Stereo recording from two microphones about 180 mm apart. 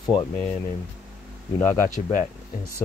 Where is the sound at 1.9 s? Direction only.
45° left (ahead or behind).